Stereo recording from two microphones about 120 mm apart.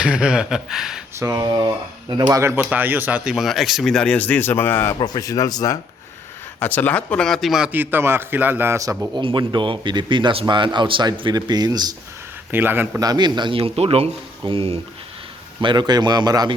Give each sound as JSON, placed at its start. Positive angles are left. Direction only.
{"t": 0.0, "sound": "speech", "side_deg": -5}
{"t": 1.1, "sound": "speech", "side_deg": -25}
{"t": 2.3, "sound": "speech", "side_deg": -20}
{"t": 4.9, "sound": "speech", "side_deg": 35}
{"t": 6.6, "sound": "speech", "side_deg": 15}
{"t": 7.7, "sound": "a man's voice", "side_deg": -15}
{"t": 9.1, "sound": "speech", "side_deg": -40}
{"t": 12.5, "sound": "a man's voice", "side_deg": -15}
{"t": 13.0, "sound": "speech", "side_deg": -35}
{"t": 15.6, "sound": "speech", "side_deg": -40}